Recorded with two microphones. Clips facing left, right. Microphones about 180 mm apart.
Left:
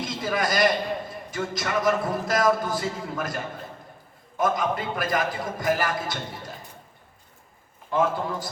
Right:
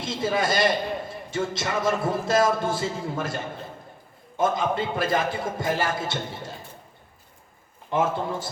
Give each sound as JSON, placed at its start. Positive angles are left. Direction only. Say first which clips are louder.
{"t": 0.0, "sound": "a man's voice", "louder": "right 2 dB", "side_deg": -25}
{"t": 7.9, "sound": "a man's voice", "louder": "even", "side_deg": -25}